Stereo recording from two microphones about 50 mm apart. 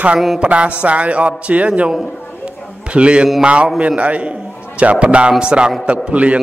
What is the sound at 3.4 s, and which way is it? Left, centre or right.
A man's voice, right.